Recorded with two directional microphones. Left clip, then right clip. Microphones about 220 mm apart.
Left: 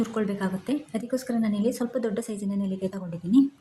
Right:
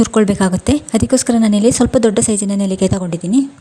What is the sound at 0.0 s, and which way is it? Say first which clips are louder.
A woman's voice: right 15 dB; 45° right (ahead or behind).